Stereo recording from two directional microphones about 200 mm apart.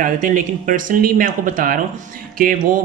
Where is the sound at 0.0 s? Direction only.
40° right (ahead or behind).